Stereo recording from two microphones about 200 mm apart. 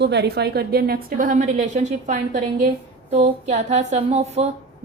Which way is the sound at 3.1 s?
30° right (ahead or behind).